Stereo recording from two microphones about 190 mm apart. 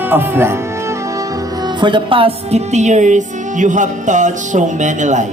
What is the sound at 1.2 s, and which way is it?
Music, 20° right (ahead or behind).